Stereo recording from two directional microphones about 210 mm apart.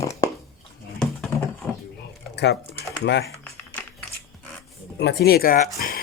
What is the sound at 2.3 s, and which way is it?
Typing, 55° left (ahead or behind).